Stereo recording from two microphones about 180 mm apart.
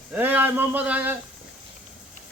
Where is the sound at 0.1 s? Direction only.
10° right (ahead or behind).